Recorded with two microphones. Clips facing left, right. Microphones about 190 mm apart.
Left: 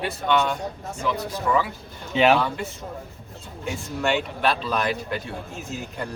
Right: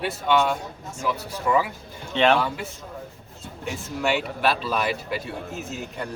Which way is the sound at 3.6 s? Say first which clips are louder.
Left 1 dB; 5° right (ahead or behind).